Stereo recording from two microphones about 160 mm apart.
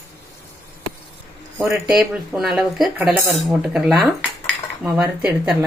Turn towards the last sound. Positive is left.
turn(degrees=-10)  # may be behind; listen again after turning